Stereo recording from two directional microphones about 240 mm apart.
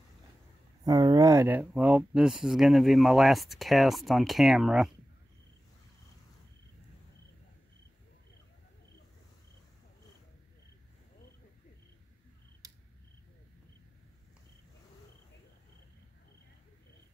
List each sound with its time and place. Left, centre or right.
0.8 s speech: centre